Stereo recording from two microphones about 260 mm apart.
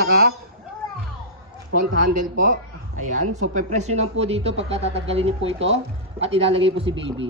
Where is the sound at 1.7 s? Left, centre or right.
Right.